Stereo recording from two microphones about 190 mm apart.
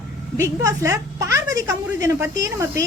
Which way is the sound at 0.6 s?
15° right (ahead or behind).